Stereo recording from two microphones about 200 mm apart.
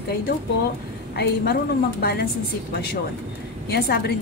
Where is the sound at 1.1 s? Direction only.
55° left (ahead or behind).